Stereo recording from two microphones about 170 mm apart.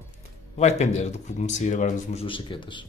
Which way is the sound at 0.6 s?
40° left (ahead or behind).